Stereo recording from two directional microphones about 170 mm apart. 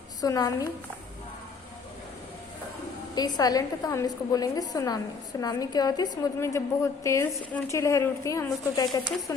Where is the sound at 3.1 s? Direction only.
25° left (ahead or behind).